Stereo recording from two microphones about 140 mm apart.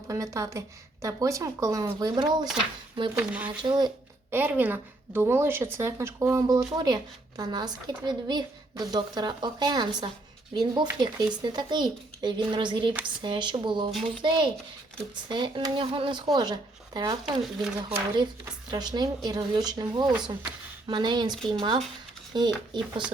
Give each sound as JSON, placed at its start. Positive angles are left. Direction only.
{"t": 0.1, "sound": "a woman's voice", "side_deg": -25}
{"t": 3.2, "sound": "speech", "side_deg": -10}
{"t": 3.6, "sound": "speech", "side_deg": -30}
{"t": 4.3, "sound": "a woman's voice", "side_deg": -15}
{"t": 17.2, "sound": "speech", "side_deg": -5}
{"t": 17.7, "sound": "speech", "side_deg": -30}